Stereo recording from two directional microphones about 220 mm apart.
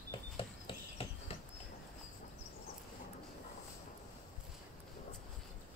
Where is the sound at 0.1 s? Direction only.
25° left (ahead or behind).